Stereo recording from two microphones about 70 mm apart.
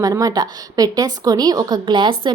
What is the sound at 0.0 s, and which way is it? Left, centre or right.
A woman's voice, right.